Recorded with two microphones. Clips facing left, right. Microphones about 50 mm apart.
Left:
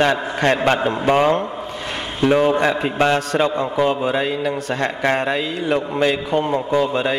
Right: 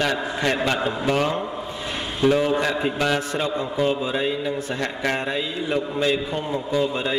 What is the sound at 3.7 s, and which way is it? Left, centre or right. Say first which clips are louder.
A man's voice: left 3 dB; left.